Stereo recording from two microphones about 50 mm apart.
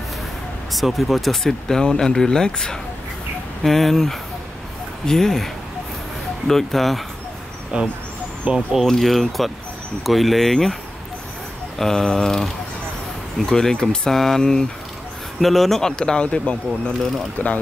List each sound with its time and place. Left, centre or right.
0.7 s speech: centre
7.7 s speech: centre
8.5 s speech: right
8.8 s speech: centre
11.8 s speech: centre
13.5 s speech: centre; by 17.5 s left